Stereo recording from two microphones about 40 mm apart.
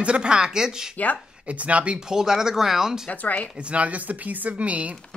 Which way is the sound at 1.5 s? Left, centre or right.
Right.